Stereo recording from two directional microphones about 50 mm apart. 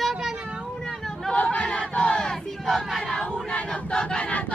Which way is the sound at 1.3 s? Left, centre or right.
Left.